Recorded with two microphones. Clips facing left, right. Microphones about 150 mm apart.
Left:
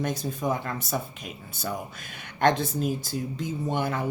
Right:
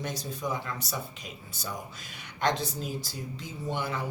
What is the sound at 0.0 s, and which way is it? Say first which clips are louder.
Speech: left 6 dB; 50° left (ahead or behind).